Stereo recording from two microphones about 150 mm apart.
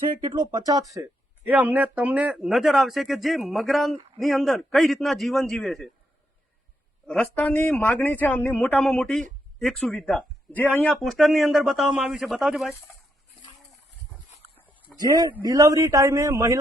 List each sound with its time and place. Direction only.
0.2 s a man's voice: 30° right (ahead or behind)
1.5 s speech: 10° right (ahead or behind)
7.1 s a man's voice: 5° left (ahead or behind)
14.9 s a man's voice: 25° right (ahead or behind)